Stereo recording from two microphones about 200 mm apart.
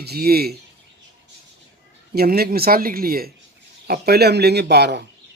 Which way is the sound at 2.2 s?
50° right (ahead or behind).